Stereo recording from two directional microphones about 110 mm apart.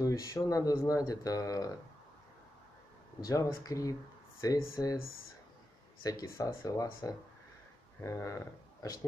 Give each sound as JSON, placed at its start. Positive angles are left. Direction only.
{"t": 0.0, "sound": "speech", "side_deg": 30}
{"t": 3.6, "sound": "speech", "side_deg": 30}
{"t": 6.0, "sound": "speech", "side_deg": 30}